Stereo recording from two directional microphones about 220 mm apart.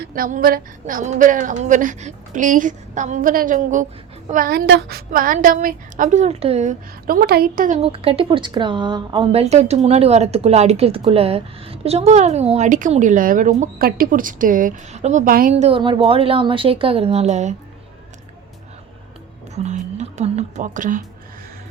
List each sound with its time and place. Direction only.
0.0 s a woman's voice: 40° right (ahead or behind)
7.8 s speech: 25° right (ahead or behind)
19.5 s speech: 30° right (ahead or behind)